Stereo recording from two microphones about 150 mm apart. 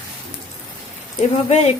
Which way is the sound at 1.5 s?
45° left (ahead or behind).